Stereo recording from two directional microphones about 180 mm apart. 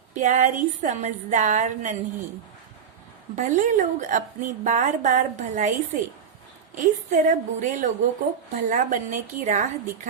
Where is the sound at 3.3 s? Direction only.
45° right (ahead or behind).